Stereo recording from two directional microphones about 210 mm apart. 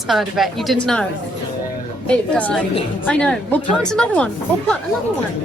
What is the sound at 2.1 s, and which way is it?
A woman's voice, 5° left (ahead or behind).